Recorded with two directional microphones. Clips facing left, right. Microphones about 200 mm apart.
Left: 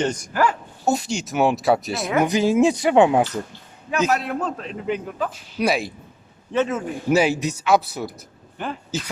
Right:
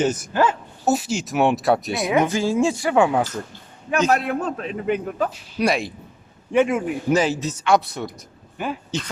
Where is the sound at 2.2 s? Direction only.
20° left (ahead or behind).